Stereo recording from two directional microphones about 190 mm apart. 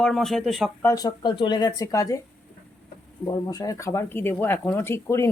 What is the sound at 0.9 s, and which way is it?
Speech, 20° left (ahead or behind).